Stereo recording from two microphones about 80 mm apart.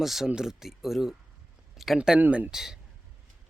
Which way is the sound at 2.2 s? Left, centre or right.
Right.